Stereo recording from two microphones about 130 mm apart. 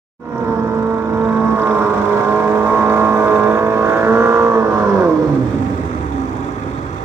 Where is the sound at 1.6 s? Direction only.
15° right (ahead or behind).